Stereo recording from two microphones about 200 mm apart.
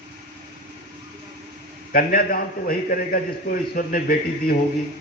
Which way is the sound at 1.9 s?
45° left (ahead or behind).